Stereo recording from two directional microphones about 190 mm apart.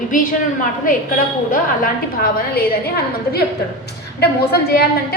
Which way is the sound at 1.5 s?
45° left (ahead or behind).